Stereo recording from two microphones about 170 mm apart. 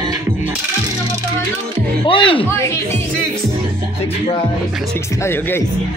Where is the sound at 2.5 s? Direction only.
15° left (ahead or behind).